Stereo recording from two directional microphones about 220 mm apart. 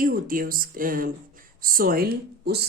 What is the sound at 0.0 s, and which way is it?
Speech, 40° right (ahead or behind).